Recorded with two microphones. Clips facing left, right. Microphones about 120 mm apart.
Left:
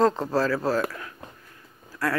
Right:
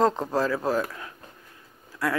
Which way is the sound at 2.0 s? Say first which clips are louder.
Even; 15° right (ahead or behind).